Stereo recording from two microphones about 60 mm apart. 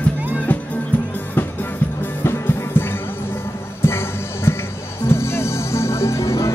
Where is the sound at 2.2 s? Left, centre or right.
Left.